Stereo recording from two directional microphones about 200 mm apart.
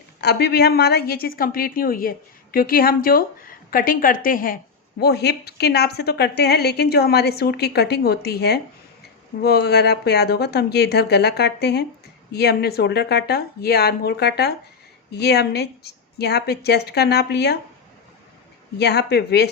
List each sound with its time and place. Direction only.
0.2 s a woman's voice: 55° left (ahead or behind)
18.8 s speech: 55° left (ahead or behind)